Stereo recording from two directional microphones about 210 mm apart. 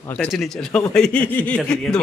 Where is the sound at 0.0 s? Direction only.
10° left (ahead or behind).